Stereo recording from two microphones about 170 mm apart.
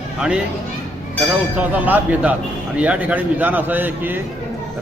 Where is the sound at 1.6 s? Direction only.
10° right (ahead or behind).